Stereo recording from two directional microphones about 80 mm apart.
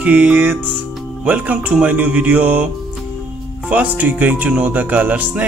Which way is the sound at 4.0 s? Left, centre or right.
Centre.